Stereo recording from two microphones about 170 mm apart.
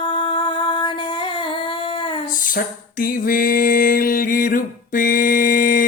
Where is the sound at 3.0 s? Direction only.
55° left (ahead or behind).